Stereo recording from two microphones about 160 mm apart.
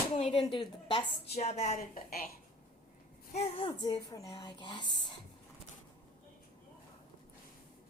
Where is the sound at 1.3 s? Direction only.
45° left (ahead or behind).